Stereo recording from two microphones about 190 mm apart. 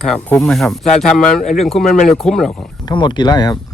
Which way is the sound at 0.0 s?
5° left (ahead or behind).